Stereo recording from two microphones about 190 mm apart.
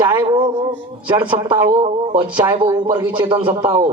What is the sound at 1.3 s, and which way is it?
Speech, 25° right (ahead or behind).